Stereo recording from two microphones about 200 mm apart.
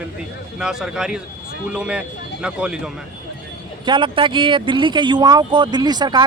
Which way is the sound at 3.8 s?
25° right (ahead or behind).